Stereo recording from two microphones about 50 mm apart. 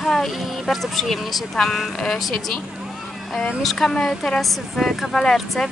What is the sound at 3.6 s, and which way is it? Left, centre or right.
Speech, centre.